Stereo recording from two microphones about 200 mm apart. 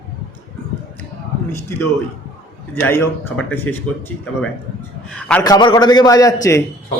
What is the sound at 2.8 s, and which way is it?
A man's voice, 10° left (ahead or behind).